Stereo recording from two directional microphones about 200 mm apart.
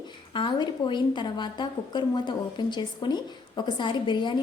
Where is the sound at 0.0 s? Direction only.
25° left (ahead or behind).